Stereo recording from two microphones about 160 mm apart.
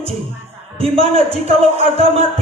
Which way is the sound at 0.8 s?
35° right (ahead or behind).